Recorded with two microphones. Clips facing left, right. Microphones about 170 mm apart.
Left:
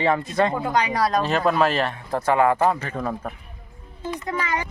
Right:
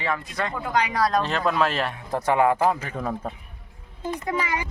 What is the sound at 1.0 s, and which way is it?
Speech, 5° left (ahead or behind).